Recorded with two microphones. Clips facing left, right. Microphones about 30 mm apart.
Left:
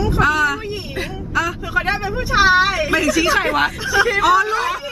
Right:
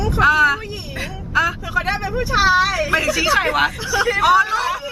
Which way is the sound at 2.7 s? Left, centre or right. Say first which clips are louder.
Left 1 dB; centre.